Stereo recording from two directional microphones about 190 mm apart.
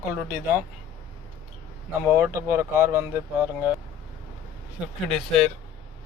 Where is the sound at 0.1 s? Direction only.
10° right (ahead or behind).